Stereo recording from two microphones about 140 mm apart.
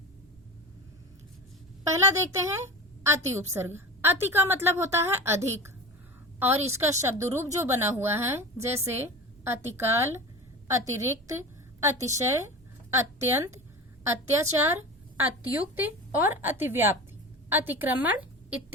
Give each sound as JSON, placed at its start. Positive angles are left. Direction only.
{"t": 2.0, "sound": "a woman's voice", "side_deg": -25}